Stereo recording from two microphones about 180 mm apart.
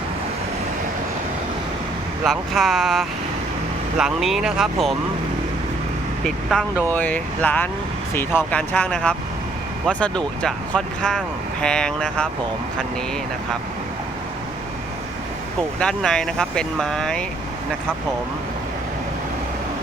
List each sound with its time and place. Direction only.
2.2 s speech: centre (ahead or behind)
6.2 s speech: centre (ahead or behind)
15.8 s speech: 5° left (ahead or behind)